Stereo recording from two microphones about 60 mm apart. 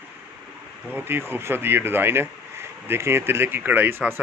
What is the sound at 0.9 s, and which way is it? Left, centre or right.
Speech, right.